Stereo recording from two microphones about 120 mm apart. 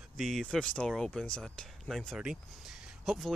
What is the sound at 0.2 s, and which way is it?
Speech, 5° left (ahead or behind).